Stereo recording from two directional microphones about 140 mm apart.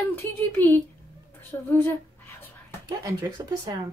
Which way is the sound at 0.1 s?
15° left (ahead or behind).